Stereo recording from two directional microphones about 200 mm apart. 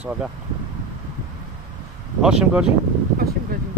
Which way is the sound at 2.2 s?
5° right (ahead or behind).